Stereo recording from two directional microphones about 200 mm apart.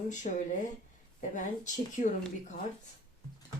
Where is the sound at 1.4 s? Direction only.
40° left (ahead or behind).